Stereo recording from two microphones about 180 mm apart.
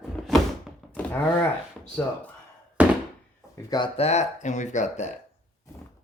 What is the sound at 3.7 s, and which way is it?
Speech, 30° left (ahead or behind).